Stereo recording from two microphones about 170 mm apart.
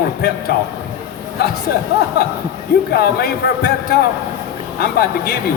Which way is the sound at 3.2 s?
65° left (ahead or behind).